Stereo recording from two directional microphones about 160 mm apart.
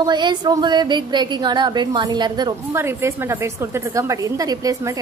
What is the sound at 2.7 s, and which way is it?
Speech, 15° right (ahead or behind).